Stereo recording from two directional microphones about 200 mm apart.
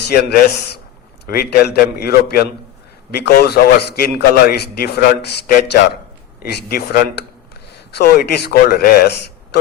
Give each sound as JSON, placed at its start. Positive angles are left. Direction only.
{"t": 0.1, "sound": "a man's voice", "side_deg": 55}